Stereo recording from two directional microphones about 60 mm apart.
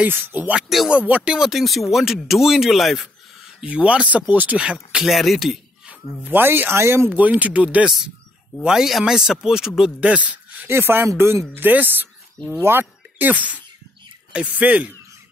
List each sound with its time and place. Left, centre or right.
0.0 s speech: right
0.6 s speech: centre
1.2 s speech: centre
1.5 s speech: centre
3.6 s speech: right
4.9 s speech: centre
6.2 s speech: right
7.1 s speech: right
8.6 s speech: centre
9.9 s speech: right
10.7 s speech: right
14.6 s speech: right